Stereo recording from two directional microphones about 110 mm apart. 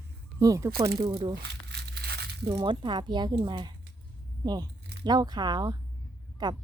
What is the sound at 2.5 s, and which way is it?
Speech, 40° right (ahead or behind).